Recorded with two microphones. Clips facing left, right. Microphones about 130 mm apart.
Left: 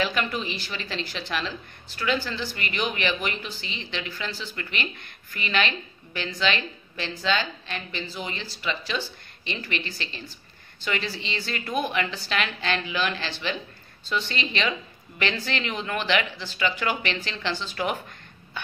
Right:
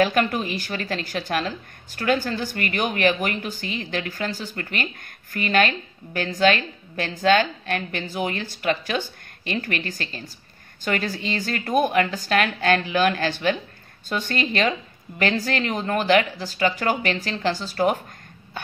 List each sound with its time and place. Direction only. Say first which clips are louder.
0.0 s a woman's voice: right 6 dB; 50° right (ahead or behind)